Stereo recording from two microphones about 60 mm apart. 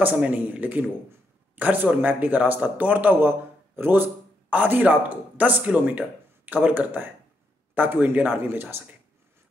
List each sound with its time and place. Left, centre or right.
0.0 s speech: right